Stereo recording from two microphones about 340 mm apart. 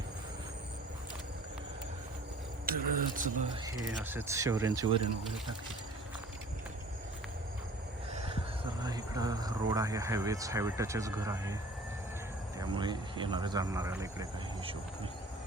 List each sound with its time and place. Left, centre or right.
2.7 s a sound: right
3.2 s speech: right
3.8 s speech: centre
8.1 s speech: centre
12.5 s speech: centre